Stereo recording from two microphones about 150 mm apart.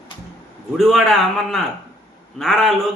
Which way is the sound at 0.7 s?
Centre (ahead or behind).